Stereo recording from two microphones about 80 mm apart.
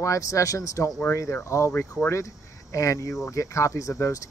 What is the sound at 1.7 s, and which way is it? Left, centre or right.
Speech, left.